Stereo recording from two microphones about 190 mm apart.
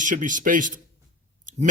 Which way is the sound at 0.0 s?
45° right (ahead or behind).